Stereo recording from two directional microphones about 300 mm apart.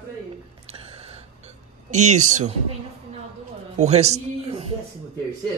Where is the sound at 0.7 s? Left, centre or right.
Centre.